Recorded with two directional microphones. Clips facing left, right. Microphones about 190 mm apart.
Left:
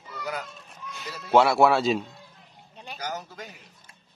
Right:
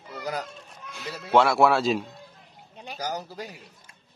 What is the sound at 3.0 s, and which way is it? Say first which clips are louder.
Speech: right 3 dB; 35° right (ahead or behind).